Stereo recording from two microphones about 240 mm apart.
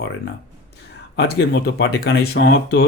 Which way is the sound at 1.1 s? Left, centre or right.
Left.